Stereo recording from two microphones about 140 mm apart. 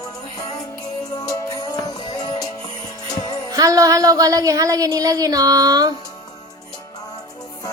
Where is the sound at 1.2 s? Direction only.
25° left (ahead or behind).